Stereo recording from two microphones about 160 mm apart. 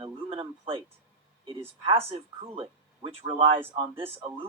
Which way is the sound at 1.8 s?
35° right (ahead or behind).